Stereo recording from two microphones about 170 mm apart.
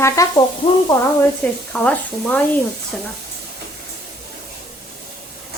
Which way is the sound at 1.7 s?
10° left (ahead or behind).